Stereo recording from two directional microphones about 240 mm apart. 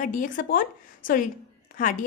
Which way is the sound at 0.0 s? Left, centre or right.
Left.